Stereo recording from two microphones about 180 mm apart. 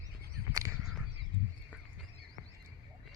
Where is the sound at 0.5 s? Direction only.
15° right (ahead or behind).